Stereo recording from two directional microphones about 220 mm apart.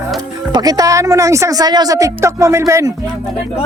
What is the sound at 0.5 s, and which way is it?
Speech, 15° right (ahead or behind).